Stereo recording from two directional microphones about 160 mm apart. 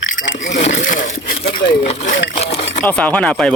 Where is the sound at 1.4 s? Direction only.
35° left (ahead or behind).